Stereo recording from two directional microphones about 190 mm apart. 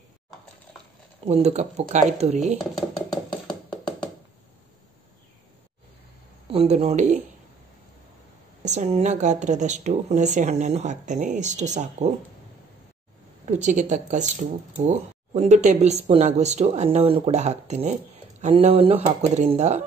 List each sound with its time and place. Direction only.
1.2 s speech: 35° right (ahead or behind)
2.6 s a sound: centre (ahead or behind)
6.4 s speech: 30° right (ahead or behind)
8.6 s speech: 35° right (ahead or behind)
13.5 s speech: 40° right (ahead or behind)